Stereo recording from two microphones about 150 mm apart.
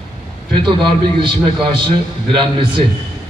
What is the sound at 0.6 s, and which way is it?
A man's voice, 35° right (ahead or behind).